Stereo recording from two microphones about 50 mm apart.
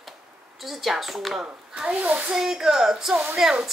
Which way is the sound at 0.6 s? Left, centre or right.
Centre.